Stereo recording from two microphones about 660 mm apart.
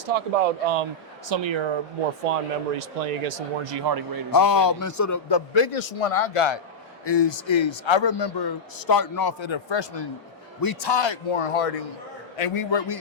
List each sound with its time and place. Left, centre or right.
0.0 s speech: right
1.3 s speech: right
2.3 s speech: right
2.7 s speech: right
3.6 s speech: right
4.3 s a man's voice: left
5.3 s a man's voice: left
12.4 s a man's voice: left